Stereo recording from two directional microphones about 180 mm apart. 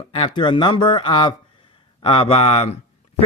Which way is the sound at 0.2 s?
25° left (ahead or behind).